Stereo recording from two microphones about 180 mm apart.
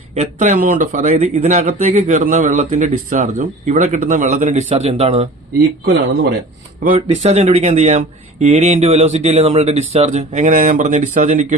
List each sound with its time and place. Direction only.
0.2 s speech: 40° right (ahead or behind)
6.8 s speech: 40° right (ahead or behind)